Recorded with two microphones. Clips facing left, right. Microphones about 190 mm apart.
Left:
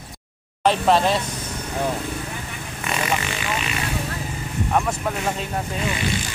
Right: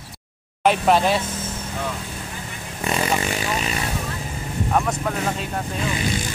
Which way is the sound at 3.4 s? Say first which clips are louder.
Right 2 dB; 35° right (ahead or behind).